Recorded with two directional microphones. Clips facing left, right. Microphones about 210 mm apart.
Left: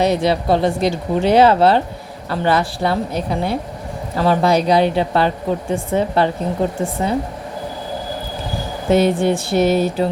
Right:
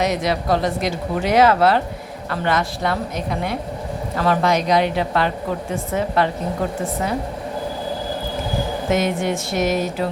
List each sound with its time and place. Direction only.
0.0 s speech: 30° left (ahead or behind)
8.9 s speech: 35° left (ahead or behind)